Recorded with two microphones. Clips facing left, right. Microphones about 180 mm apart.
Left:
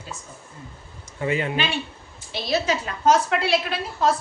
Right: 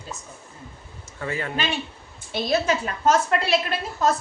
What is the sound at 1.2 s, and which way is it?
Speech, 20° left (ahead or behind).